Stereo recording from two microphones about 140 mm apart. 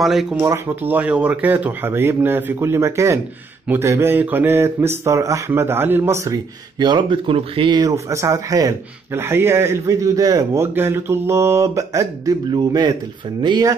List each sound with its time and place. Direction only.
0.0 s speech: centre (ahead or behind)
0.4 s speech: 15° right (ahead or behind)